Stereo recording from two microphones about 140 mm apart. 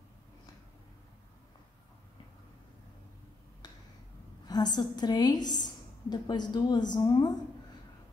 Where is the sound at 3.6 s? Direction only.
30° left (ahead or behind).